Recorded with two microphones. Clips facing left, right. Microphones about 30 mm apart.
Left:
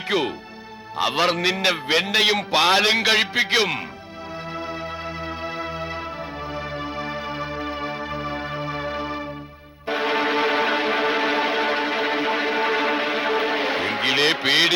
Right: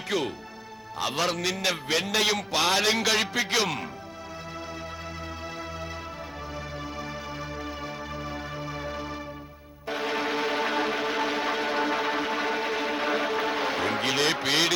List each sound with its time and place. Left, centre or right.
0.1 s a man's voice: left
7.0 s music: left